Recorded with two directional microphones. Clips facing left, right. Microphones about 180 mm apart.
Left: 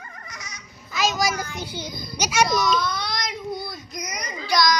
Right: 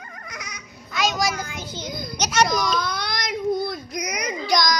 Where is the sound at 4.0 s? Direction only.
65° right (ahead or behind).